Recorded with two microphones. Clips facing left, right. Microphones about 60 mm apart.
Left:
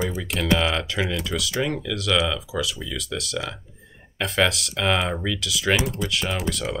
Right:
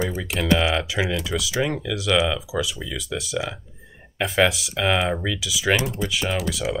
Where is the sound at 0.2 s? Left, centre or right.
Centre.